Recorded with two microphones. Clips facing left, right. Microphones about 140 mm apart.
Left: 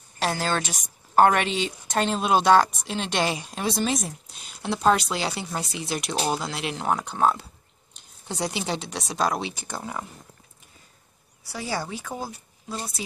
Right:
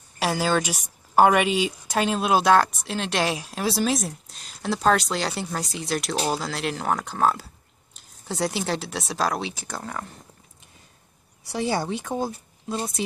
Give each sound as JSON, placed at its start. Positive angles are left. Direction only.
{"t": 0.2, "sound": "speech", "side_deg": -10}
{"t": 11.5, "sound": "speech", "side_deg": -25}